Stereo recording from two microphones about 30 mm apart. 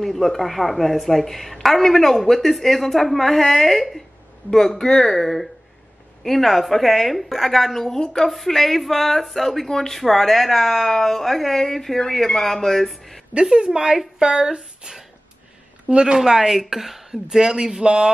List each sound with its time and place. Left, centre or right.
0.0 s a woman's voice: centre
4.5 s a woman's voice: centre
5.1 s a woman's voice: centre
13.3 s speech: right
16.3 s speech: centre
16.5 s a woman's voice: centre
17.1 s speech: centre